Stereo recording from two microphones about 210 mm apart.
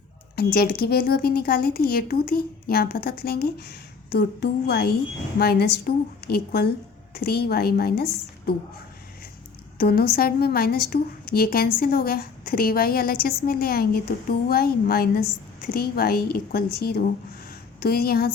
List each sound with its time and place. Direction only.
0.3 s a woman's voice: 50° left (ahead or behind)
9.7 s a woman's voice: 45° left (ahead or behind)